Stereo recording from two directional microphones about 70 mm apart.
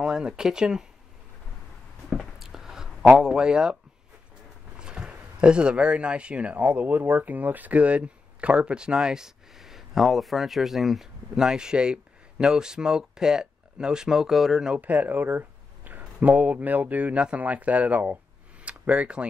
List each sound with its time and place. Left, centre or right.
0.0 s speech: centre
2.0 s a sound: centre
4.7 s speech: centre
14.7 s speech: right